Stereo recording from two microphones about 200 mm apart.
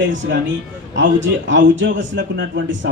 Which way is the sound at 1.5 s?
65° right (ahead or behind).